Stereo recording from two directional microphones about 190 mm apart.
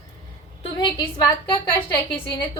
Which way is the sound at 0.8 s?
25° left (ahead or behind).